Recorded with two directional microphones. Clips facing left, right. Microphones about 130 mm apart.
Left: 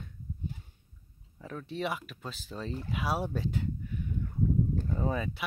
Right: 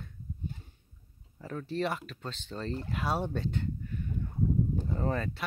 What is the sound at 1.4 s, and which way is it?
Speech, centre (ahead or behind).